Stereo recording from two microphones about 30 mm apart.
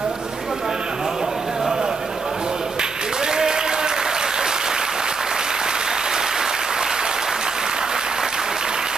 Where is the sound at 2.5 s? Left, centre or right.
Right.